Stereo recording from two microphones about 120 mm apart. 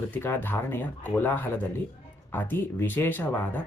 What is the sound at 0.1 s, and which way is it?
Speech, 20° left (ahead or behind).